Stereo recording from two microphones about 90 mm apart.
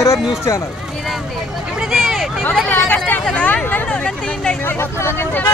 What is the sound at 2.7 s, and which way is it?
Hubbub, 15° left (ahead or behind).